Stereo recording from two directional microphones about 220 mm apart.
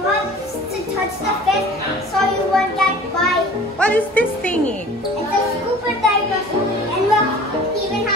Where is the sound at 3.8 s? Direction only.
5° left (ahead or behind).